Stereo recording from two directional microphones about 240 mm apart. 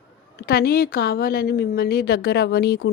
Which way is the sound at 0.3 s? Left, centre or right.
Left.